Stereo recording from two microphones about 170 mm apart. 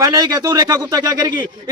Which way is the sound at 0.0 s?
20° right (ahead or behind).